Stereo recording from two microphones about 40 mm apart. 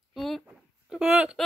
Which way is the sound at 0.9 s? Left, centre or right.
Centre.